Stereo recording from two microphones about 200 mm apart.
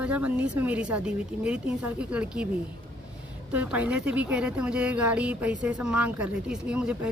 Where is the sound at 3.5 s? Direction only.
5° right (ahead or behind).